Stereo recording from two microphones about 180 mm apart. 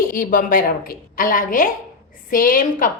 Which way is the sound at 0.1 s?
50° left (ahead or behind).